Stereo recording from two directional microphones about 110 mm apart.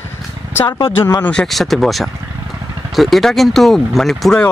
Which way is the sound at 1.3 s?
5° left (ahead or behind).